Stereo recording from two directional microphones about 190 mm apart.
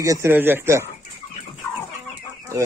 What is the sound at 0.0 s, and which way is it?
Speech, 15° right (ahead or behind).